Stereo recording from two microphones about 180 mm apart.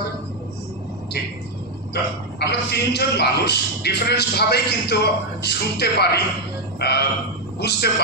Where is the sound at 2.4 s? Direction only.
65° left (ahead or behind).